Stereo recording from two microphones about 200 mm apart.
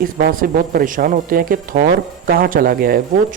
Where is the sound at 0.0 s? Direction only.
45° right (ahead or behind).